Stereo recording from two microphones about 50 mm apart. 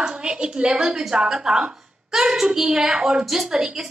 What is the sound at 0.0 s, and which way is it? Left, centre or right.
Speech, centre.